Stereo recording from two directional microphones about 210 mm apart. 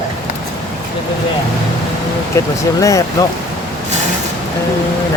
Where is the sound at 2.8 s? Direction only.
15° left (ahead or behind).